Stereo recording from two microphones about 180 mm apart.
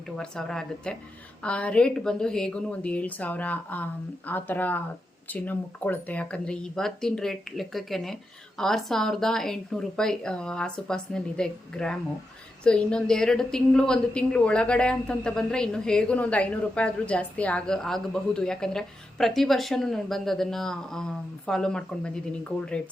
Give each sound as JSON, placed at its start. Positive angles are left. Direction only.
{"t": 0.2, "sound": "a woman's voice", "side_deg": 5}